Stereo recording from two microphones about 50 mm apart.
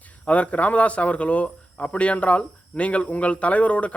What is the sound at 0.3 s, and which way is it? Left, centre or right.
Speech, left.